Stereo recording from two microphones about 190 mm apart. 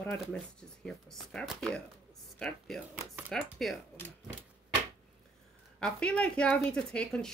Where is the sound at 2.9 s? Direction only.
10° right (ahead or behind).